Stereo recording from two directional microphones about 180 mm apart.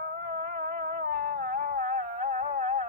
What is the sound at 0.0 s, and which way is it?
Music, 50° right (ahead or behind).